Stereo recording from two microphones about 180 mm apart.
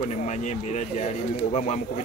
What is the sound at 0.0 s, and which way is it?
Speech, 40° left (ahead or behind).